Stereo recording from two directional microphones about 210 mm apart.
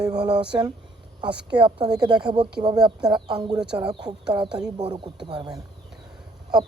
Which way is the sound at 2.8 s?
5° right (ahead or behind).